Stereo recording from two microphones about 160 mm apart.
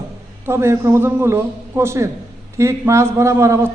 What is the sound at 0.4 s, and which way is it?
A man's voice, 15° right (ahead or behind).